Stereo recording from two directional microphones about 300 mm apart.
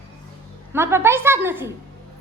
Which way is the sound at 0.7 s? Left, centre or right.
Centre.